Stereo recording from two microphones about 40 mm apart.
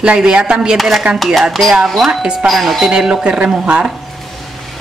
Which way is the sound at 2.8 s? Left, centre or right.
Centre.